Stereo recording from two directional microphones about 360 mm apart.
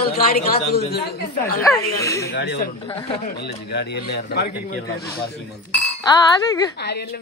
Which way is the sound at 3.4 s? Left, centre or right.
Left.